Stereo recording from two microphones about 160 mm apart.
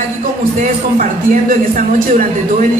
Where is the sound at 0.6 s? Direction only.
55° right (ahead or behind).